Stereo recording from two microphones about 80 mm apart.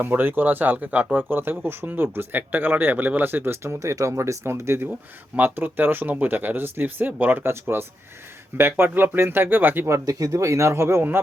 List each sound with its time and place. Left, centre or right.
0.0 s speech: right